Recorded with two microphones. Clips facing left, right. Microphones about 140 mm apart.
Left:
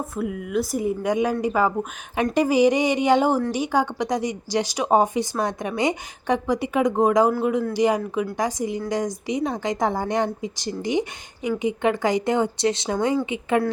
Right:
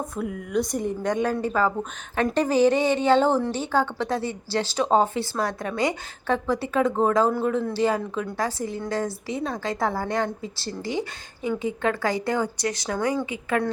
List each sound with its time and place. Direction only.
0.0 s speech: 5° left (ahead or behind); by 13.1 s 20° left (ahead or behind)